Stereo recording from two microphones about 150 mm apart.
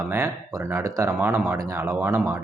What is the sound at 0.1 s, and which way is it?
Speech, 15° right (ahead or behind).